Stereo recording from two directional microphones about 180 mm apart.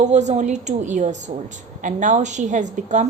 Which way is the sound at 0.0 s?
40° right (ahead or behind).